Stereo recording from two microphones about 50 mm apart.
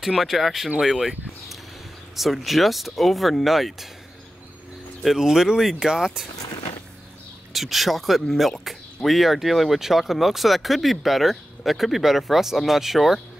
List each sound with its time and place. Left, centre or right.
0.0 s speech: centre
5.0 s speech: centre
7.5 s speech: centre